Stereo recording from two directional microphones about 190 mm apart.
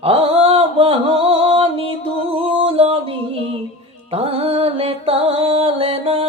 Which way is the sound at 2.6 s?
30° right (ahead or behind).